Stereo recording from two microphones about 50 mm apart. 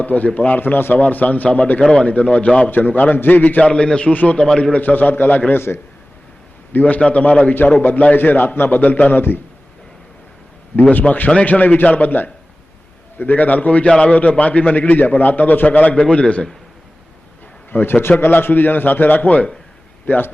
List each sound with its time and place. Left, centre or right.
0.0 s a man's voice: left
2.6 s a man's voice: left
3.6 s a man's voice: left
4.1 s a man's voice: left
4.4 s a man's voice: centre
4.8 s a man's voice: left
5.5 s a man's voice: left
6.7 s a man's voice: left
11.1 s speech: centre
11.4 s a man's voice: left
16.0 s a man's voice: centre
17.7 s a man's voice: left